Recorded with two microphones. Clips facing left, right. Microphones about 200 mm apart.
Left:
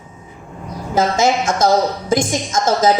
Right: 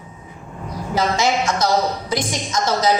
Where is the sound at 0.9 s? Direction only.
50° left (ahead or behind).